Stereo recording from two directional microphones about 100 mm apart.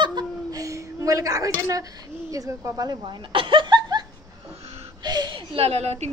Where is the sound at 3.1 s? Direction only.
55° right (ahead or behind).